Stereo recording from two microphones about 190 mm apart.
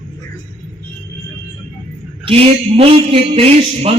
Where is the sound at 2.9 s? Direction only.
30° right (ahead or behind).